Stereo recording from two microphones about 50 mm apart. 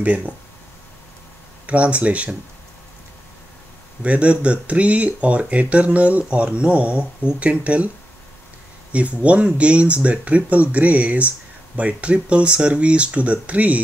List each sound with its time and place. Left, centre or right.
0.0 s speech: right
1.7 s speech: right
4.0 s speech: right
8.9 s speech: right